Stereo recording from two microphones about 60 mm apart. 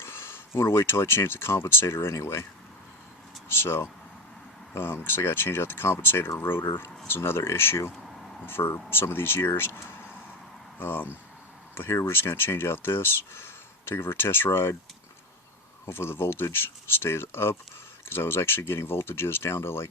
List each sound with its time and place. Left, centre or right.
0.0 s speech: left
3.5 s speech: left
15.9 s speech: left